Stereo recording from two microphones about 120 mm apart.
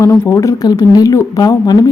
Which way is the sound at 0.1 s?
25° left (ahead or behind).